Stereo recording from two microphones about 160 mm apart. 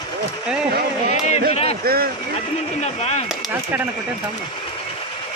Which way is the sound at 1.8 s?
70° right (ahead or behind).